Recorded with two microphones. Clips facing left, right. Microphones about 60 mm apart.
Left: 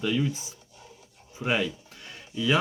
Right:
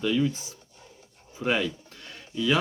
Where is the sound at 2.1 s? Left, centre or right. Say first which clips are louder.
Even; centre.